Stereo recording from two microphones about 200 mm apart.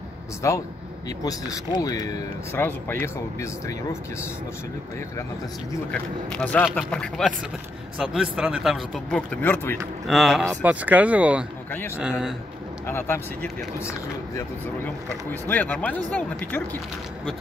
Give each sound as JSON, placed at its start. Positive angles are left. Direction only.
{"t": 0.4, "sound": "speech", "side_deg": 15}
{"t": 5.7, "sound": "speech", "side_deg": 5}
{"t": 10.0, "sound": "speech", "side_deg": 0}
{"t": 12.8, "sound": "speech", "side_deg": 10}
{"t": 15.4, "sound": "speech", "side_deg": 10}